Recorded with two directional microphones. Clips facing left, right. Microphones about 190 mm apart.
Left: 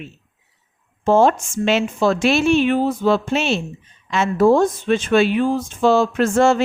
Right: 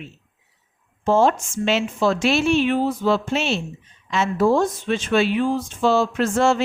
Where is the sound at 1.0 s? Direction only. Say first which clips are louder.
Left 3 dB; 55° left (ahead or behind).